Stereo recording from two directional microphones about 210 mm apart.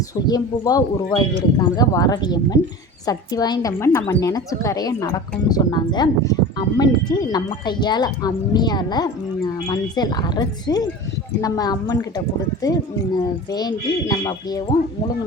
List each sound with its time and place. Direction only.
0.3 s a woman's voice: 15° left (ahead or behind)
13.2 s a woman's voice: 20° left (ahead or behind)